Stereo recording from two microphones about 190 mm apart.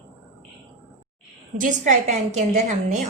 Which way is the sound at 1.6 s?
40° right (ahead or behind).